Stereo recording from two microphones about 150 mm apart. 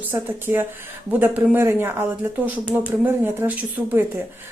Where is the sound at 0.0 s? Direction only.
15° right (ahead or behind).